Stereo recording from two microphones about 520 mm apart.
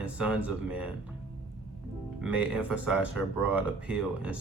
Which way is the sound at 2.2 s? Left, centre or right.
Centre.